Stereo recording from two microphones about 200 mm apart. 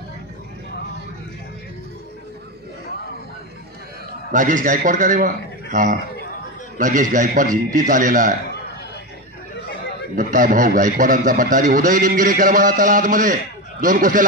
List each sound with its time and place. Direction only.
4.3 s a man's voice: 40° right (ahead or behind)
10.1 s a man's voice: 40° right (ahead or behind)